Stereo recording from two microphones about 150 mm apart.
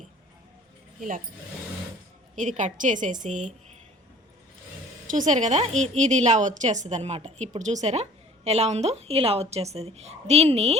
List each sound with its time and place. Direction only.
2.3 s a woman's voice: 55° right (ahead or behind)
5.0 s a woman's voice: 60° right (ahead or behind); by 10.8 s 45° right (ahead or behind)